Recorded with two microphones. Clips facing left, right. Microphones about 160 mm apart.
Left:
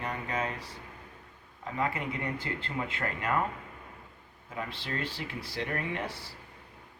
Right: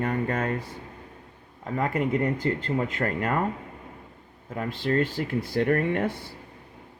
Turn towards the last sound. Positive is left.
turn(degrees=-55)  # may be behind; listen again after turning